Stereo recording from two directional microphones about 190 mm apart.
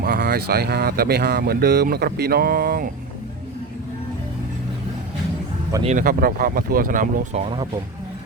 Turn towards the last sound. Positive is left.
turn(degrees=-45)  # may be behind; listen again after turning